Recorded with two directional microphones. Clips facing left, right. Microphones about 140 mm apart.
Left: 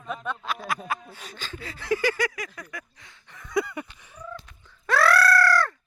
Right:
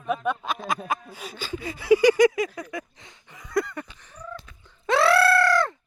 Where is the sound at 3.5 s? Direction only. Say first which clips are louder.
Right 1 dB; 5° left (ahead or behind).